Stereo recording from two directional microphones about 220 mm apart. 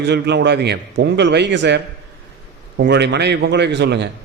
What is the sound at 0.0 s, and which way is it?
A man's voice, 50° right (ahead or behind).